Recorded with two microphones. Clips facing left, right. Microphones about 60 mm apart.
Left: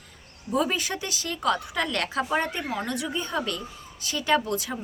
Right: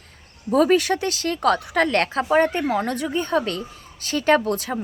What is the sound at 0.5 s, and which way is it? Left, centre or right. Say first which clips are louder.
Speech: right 9 dB; right.